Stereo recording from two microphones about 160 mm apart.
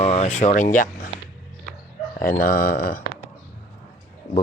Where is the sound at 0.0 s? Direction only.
40° left (ahead or behind).